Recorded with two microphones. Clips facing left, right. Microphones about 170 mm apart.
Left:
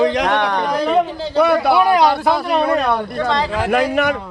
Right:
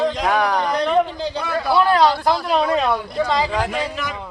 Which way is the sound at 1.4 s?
70° left (ahead or behind).